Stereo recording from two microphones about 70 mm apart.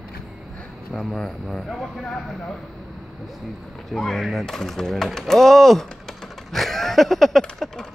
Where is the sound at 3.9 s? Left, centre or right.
Centre.